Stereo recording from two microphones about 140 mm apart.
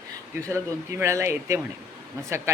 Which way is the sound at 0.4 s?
20° right (ahead or behind).